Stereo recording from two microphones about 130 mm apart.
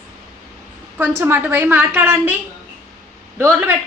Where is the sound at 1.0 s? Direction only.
15° right (ahead or behind).